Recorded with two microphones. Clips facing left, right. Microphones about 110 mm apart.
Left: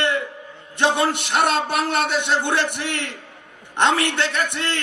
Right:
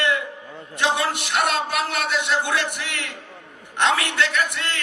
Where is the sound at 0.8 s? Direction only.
30° left (ahead or behind).